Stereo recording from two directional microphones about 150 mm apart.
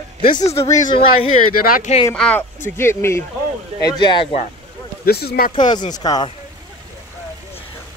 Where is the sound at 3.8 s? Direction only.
30° left (ahead or behind).